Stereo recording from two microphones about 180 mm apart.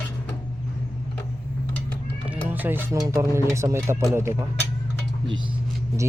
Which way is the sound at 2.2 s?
10° right (ahead or behind).